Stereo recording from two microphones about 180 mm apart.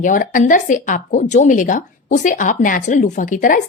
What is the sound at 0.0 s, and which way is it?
Speech, 50° left (ahead or behind).